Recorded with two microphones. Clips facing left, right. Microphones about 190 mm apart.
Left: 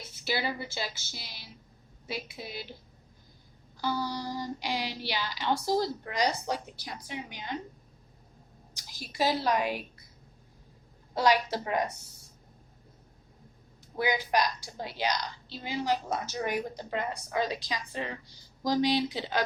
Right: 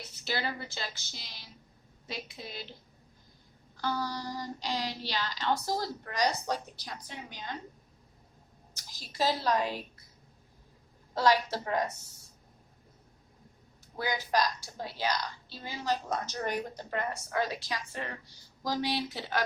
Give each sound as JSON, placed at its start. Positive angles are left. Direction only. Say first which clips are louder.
{"t": 0.3, "sound": "a woman's voice", "louder": "left 3 dB", "side_deg": 10}
{"t": 3.8, "sound": "a woman's voice", "louder": "left 2 dB", "side_deg": 10}
{"t": 8.7, "sound": "a woman's voice", "louder": "left 4 dB", "side_deg": 10}
{"t": 11.1, "sound": "a woman's voice", "louder": "left 1 dB", "side_deg": 15}
{"t": 14.0, "sound": "a woman's voice", "louder": "left 2 dB", "side_deg": 15}